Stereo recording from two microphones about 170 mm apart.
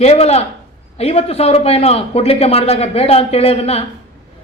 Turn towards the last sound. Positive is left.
turn(degrees=35)  # may be behind; listen again after turning